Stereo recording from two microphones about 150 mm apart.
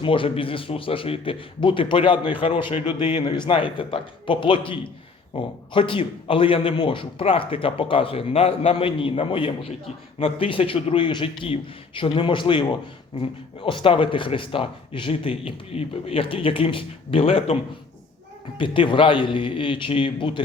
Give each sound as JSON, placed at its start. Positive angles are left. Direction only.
{"t": 0.0, "sound": "a man's voice", "side_deg": 35}